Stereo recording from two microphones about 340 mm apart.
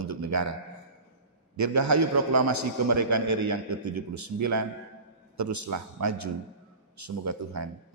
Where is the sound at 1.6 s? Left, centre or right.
Right.